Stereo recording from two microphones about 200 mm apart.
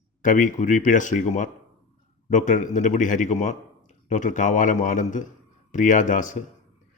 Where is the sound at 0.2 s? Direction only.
40° left (ahead or behind).